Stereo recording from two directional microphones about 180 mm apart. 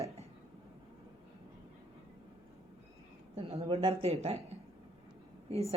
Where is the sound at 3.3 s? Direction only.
35° right (ahead or behind).